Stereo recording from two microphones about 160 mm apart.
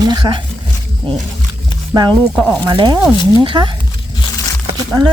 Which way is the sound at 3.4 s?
30° right (ahead or behind).